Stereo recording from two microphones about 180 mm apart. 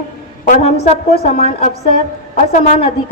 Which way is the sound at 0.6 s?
35° left (ahead or behind).